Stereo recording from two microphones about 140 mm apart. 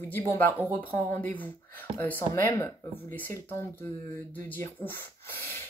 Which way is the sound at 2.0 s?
15° left (ahead or behind).